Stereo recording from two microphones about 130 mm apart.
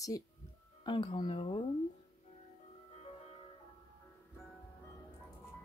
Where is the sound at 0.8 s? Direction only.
40° left (ahead or behind).